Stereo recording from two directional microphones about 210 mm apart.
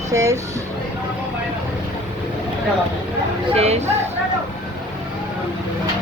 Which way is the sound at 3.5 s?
30° right (ahead or behind).